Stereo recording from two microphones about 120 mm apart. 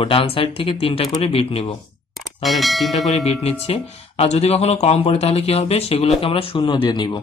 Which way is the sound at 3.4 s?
55° left (ahead or behind).